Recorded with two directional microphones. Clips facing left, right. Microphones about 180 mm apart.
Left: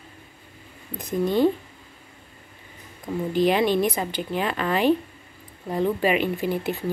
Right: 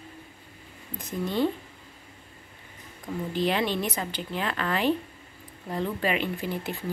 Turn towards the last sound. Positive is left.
turn(degrees=15)  # may be behind; listen again after turning